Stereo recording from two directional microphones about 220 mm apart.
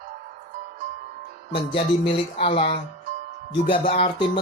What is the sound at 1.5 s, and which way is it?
Music, 25° left (ahead or behind).